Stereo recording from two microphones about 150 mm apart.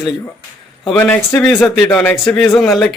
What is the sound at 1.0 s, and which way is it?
Speech, 10° left (ahead or behind).